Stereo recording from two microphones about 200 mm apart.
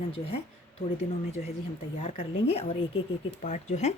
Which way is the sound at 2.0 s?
30° left (ahead or behind).